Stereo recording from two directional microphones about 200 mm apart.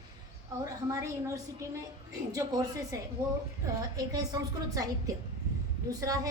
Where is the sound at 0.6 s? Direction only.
15° right (ahead or behind).